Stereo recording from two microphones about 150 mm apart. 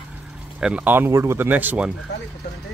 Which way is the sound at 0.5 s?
10° right (ahead or behind).